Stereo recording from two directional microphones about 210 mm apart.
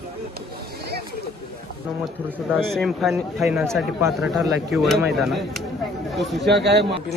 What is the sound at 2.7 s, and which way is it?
A man's voice, centre (ahead or behind).